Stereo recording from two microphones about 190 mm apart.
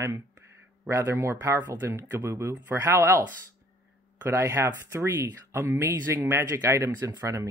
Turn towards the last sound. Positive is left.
turn(degrees=-15)  # may be behind; listen again after turning